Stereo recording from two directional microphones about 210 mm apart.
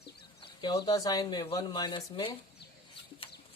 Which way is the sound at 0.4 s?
25° left (ahead or behind).